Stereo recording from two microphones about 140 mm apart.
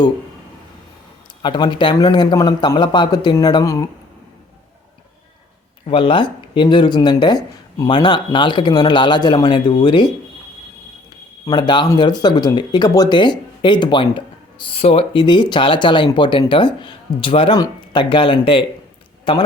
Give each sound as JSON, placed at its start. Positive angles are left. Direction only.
{"t": 1.4, "sound": "speech", "side_deg": 35}
{"t": 5.8, "sound": "speech", "side_deg": 40}
{"t": 11.4, "sound": "speech", "side_deg": 30}